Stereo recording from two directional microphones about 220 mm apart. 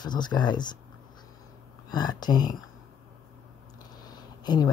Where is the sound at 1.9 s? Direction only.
20° left (ahead or behind).